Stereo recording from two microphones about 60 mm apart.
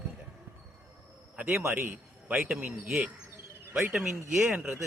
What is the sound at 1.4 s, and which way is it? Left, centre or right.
Speech, right.